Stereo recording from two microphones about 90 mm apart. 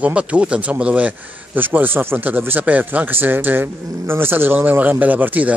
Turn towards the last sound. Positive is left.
turn(degrees=-20)  # may be behind; listen again after turning